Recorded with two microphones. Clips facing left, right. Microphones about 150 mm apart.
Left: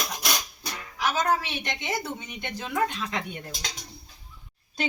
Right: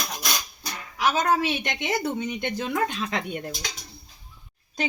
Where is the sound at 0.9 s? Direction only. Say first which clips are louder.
Right 3 dB; 65° right (ahead or behind).